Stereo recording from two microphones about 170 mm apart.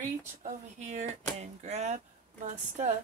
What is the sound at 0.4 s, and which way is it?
A woman's voice, 45° right (ahead or behind).